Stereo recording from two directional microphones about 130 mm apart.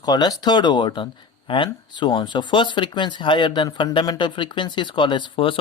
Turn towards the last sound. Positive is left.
turn(degrees=40)  # may be behind; listen again after turning